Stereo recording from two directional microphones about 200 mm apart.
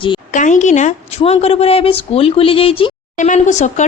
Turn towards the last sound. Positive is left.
turn(degrees=35)  # may be behind; listen again after turning